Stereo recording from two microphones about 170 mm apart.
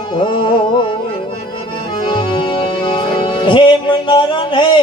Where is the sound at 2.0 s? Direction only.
30° left (ahead or behind).